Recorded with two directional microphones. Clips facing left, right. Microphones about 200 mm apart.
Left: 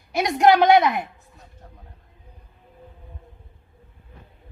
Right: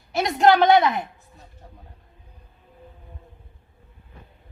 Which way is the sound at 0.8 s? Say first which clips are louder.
Left 1 dB; centre (ahead or behind).